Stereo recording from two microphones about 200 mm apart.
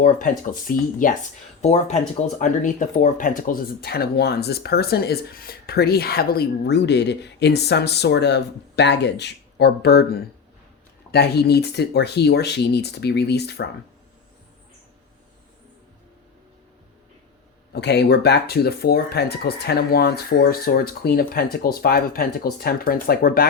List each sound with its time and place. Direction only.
0.0 s speech: 40° left (ahead or behind)
17.7 s speech: 55° left (ahead or behind)